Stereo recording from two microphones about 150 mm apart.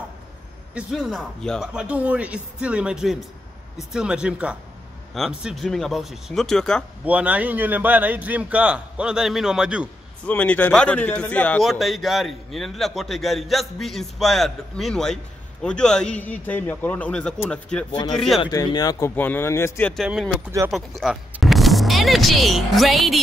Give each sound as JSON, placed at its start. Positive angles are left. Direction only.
{"t": 0.7, "sound": "a man's voice", "side_deg": -5}
{"t": 7.1, "sound": "a man's voice", "side_deg": -10}
{"t": 10.2, "sound": "a man's voice", "side_deg": 10}
{"t": 18.5, "sound": "a man's voice", "side_deg": 25}
{"t": 20.0, "sound": "a man's voice", "side_deg": -5}